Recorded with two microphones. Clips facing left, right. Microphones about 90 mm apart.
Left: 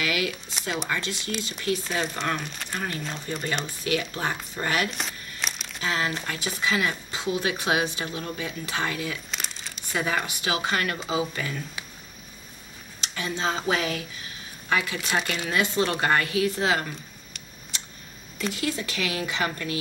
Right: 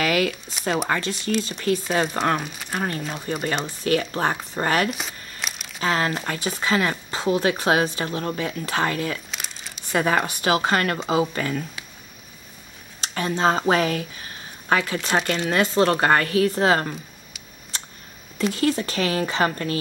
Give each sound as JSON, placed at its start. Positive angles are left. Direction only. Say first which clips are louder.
{"t": 0.0, "sound": "a sound", "louder": "right 6 dB", "side_deg": -45}
{"t": 0.8, "sound": "speech", "louder": "right 5 dB", "side_deg": -45}
{"t": 2.4, "sound": "speech", "louder": "right 2 dB", "side_deg": -5}
{"t": 2.7, "sound": "speech", "louder": "right 5 dB", "side_deg": -40}
{"t": 3.0, "sound": "speech", "louder": "right 4 dB", "side_deg": -5}
{"t": 3.8, "sound": "speech", "louder": "right 7 dB", "side_deg": -40}
{"t": 4.9, "sound": "crumpling", "louder": "even", "side_deg": -5}
{"t": 5.8, "sound": "speech", "louder": "right 5 dB", "side_deg": -45}
{"t": 9.3, "sound": "crumpling", "louder": "even", "side_deg": 0}
{"t": 9.9, "sound": "speech", "louder": "right 6 dB", "side_deg": -45}
{"t": 13.0, "sound": "speech", "louder": "right 7 dB", "side_deg": -40}
{"t": 18.4, "sound": "speech", "louder": "right 7 dB", "side_deg": -40}